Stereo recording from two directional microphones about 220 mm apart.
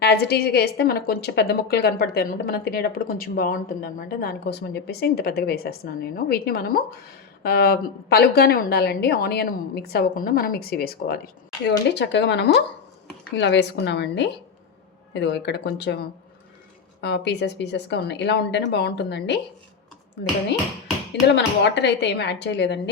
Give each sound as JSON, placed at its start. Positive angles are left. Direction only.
{"t": 0.0, "sound": "a woman's voice", "side_deg": 45}
{"t": 21.3, "sound": "a woman's voice", "side_deg": 50}